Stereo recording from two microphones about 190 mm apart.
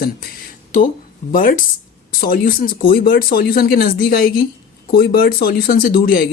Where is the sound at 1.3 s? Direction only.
45° left (ahead or behind).